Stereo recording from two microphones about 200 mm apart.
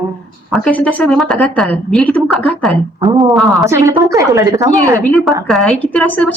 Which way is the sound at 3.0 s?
15° right (ahead or behind).